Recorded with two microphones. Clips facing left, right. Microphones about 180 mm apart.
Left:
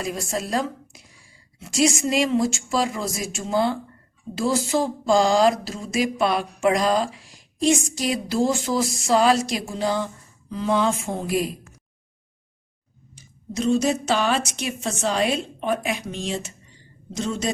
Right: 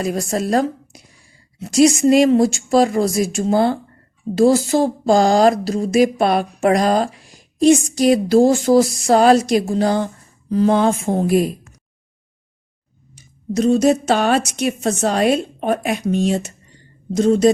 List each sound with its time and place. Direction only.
0.0 s a woman's voice: 50° right (ahead or behind)
2.0 s speech: 50° right (ahead or behind)
13.7 s speech: 55° right (ahead or behind)